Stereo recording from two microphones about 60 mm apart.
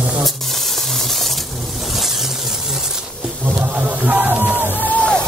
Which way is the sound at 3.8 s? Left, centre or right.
Right.